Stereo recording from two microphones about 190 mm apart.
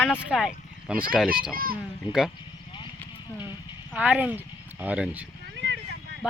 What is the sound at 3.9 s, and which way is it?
Speech, 5° right (ahead or behind).